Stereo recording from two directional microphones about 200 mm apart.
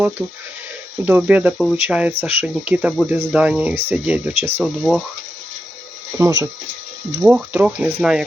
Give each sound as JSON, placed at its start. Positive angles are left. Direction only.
{"t": 0.2, "sound": "speech", "side_deg": -5}
{"t": 6.1, "sound": "speech", "side_deg": -15}